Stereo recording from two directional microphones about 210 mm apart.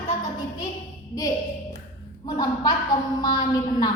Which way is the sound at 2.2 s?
15° left (ahead or behind).